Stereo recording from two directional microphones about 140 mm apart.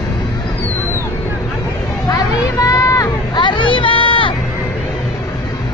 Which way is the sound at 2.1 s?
25° left (ahead or behind).